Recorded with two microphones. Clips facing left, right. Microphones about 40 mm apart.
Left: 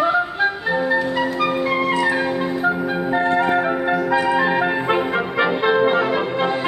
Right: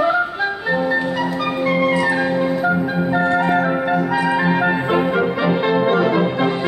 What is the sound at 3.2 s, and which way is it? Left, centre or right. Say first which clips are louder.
Music: even; left.